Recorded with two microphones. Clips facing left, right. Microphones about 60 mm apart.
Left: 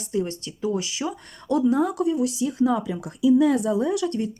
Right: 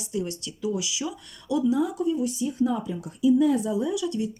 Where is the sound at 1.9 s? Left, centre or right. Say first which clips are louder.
Left 3 dB; left.